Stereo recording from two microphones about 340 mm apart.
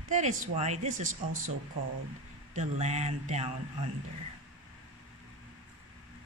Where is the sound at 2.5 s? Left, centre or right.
Centre.